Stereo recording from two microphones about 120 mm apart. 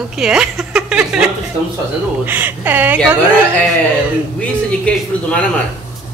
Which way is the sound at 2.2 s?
15° right (ahead or behind).